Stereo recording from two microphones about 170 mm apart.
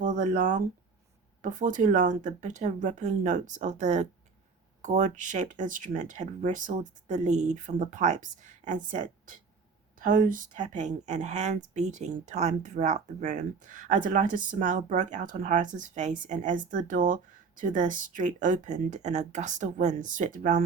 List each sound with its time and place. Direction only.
0.0 s speech: 50° right (ahead or behind)